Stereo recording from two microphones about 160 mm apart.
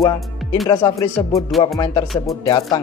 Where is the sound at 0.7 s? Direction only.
20° left (ahead or behind).